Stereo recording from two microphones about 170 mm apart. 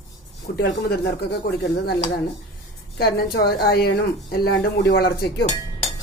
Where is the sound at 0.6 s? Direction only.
75° left (ahead or behind).